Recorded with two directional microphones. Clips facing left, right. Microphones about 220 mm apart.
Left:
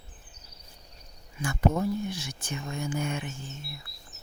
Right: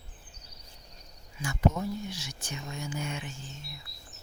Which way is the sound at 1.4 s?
55° left (ahead or behind).